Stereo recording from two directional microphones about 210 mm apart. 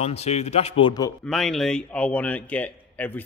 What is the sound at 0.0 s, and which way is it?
A man's voice, 30° left (ahead or behind).